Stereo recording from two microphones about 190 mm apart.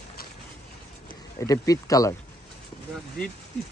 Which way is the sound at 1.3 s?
15° left (ahead or behind).